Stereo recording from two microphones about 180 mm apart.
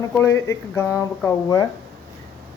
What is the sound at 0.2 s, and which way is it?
Speech, 15° left (ahead or behind).